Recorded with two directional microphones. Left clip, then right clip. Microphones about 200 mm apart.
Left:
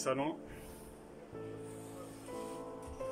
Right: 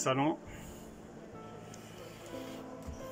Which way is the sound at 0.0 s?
5° right (ahead or behind).